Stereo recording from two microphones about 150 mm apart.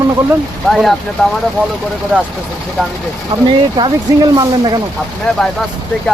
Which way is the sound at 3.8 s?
30° right (ahead or behind).